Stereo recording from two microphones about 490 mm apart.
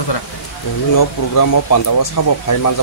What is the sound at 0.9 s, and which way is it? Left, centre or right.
Speech, left.